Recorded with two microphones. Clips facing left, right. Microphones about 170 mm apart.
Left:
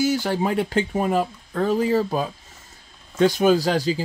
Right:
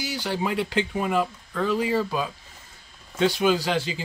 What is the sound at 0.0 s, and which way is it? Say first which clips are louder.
Speech: left 7 dB; 45° left (ahead or behind).